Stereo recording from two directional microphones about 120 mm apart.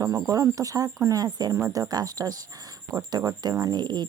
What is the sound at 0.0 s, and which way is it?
Speech, 30° right (ahead or behind).